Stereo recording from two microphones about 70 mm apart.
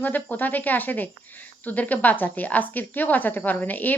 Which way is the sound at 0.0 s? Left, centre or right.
Left.